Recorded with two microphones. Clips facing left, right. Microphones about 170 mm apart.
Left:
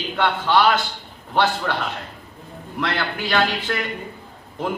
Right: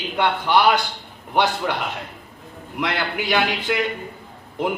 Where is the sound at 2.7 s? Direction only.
15° right (ahead or behind).